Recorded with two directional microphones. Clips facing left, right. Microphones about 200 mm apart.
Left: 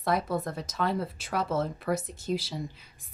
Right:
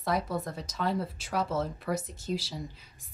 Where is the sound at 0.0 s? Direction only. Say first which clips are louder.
Left 2 dB; 55° left (ahead or behind).